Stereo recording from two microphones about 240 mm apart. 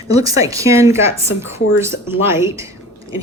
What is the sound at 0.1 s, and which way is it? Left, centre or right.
Speech, centre.